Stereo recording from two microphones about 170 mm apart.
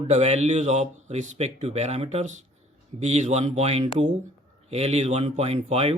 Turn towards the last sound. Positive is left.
turn(degrees=-35)  # may be behind; listen again after turning